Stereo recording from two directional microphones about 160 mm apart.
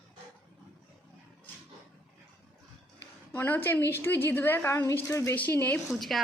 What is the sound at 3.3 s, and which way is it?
A woman's voice, 10° left (ahead or behind).